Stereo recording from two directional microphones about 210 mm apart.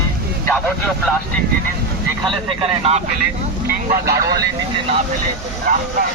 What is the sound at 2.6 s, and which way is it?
Speech, 30° right (ahead or behind).